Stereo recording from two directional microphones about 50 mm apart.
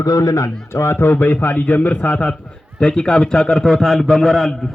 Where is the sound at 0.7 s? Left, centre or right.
Left.